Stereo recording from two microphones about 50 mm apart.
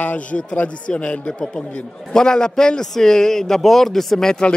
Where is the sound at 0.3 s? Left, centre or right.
Left.